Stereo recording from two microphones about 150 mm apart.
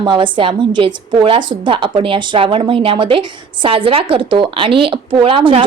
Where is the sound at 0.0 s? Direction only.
35° right (ahead or behind).